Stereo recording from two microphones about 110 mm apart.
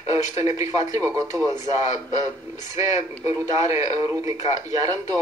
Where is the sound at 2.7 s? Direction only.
30° right (ahead or behind).